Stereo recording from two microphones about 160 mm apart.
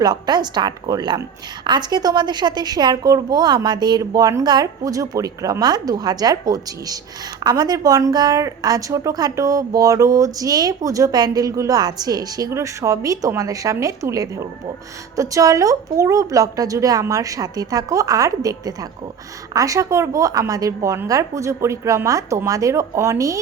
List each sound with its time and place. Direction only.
0.0 s a woman's voice: 25° right (ahead or behind)